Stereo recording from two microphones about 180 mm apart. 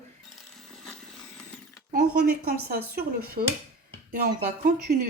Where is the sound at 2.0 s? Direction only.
60° right (ahead or behind).